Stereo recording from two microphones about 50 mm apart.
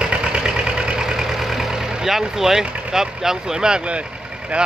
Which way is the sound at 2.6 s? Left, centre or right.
Right.